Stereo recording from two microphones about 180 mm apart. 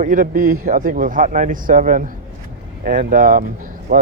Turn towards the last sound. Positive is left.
turn(degrees=-45)  # may be behind; listen again after turning